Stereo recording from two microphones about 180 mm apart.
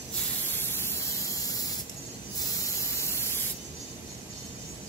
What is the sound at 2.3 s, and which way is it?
Spray, 15° left (ahead or behind).